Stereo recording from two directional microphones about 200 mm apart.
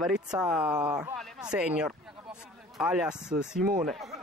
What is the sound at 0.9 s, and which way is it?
Speech, 20° right (ahead or behind).